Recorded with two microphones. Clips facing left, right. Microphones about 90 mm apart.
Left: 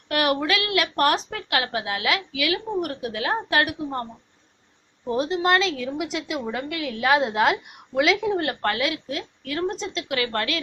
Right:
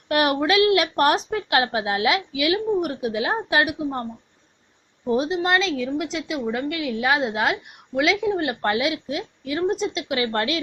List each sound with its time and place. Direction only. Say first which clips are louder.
0.1 s a woman's voice: right 3 dB; 25° right (ahead or behind)
5.0 s a woman's voice: right 3 dB; 20° right (ahead or behind)
5.3 s a woman's voice: even; centre (ahead or behind)
8.6 s a woman's voice: right 2 dB; 20° right (ahead or behind)